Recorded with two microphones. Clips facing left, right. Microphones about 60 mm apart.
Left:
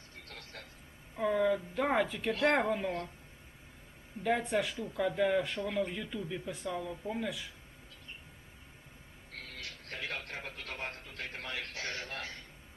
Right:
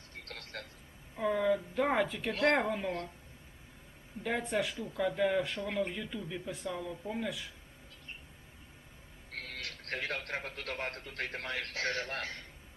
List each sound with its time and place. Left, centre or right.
0.3 s vehicle: right
1.1 s speech: centre
4.2 s speech: centre
9.3 s music: right
10.2 s a man's voice: right